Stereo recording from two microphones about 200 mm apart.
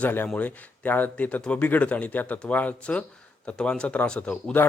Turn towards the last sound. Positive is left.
turn(degrees=10)  # may be behind; listen again after turning